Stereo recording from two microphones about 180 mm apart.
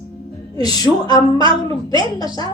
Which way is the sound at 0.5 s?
20° left (ahead or behind).